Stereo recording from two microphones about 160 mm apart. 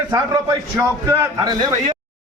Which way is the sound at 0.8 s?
20° right (ahead or behind).